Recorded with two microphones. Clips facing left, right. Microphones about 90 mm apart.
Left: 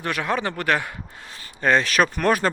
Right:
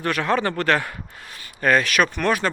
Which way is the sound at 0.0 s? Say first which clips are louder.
Right 3 dB; 15° left (ahead or behind).